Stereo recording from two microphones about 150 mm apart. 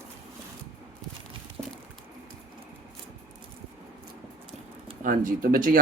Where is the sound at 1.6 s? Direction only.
15° right (ahead or behind).